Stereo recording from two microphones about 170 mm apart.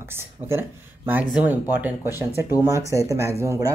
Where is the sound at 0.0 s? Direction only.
15° right (ahead or behind).